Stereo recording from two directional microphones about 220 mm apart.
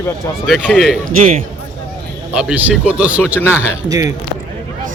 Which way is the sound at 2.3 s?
5° right (ahead or behind).